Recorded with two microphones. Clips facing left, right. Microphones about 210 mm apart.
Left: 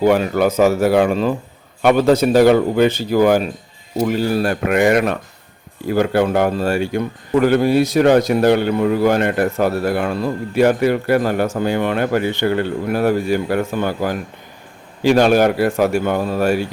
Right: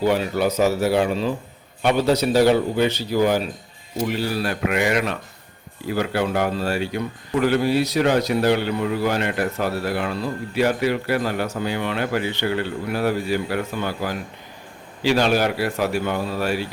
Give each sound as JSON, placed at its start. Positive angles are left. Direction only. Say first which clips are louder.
{"t": 0.0, "sound": "a man's voice", "louder": "left 5 dB", "side_deg": 50}